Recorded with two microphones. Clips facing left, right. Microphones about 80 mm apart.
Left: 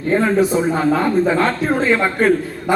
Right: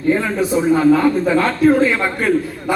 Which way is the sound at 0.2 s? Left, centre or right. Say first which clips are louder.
Left 2 dB; left.